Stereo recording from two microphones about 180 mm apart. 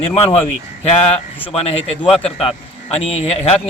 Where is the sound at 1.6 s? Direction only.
35° left (ahead or behind).